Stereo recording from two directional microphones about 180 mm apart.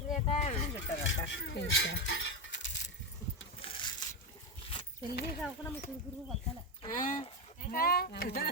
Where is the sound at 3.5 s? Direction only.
30° left (ahead or behind).